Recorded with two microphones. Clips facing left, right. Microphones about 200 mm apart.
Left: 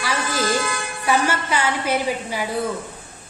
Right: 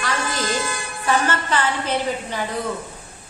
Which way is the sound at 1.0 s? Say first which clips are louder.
Even; 10° left (ahead or behind).